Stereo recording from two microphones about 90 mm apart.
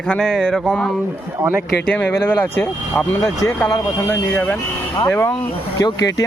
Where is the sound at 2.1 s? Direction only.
20° left (ahead or behind).